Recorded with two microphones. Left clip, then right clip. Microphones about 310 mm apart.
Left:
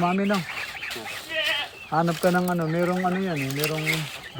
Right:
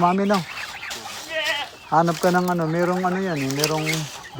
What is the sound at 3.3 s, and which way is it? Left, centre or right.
Speech, right.